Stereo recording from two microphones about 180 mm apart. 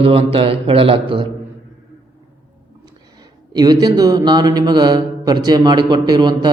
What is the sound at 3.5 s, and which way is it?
A man's voice, 20° right (ahead or behind).